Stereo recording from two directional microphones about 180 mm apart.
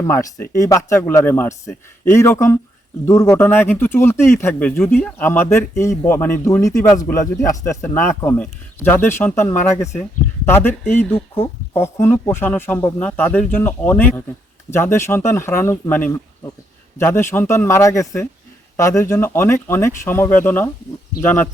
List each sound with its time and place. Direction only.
0.0 s speech: 20° left (ahead or behind)